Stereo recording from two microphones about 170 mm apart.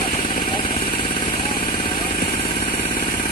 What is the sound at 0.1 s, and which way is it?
Vehicle, 30° left (ahead or behind).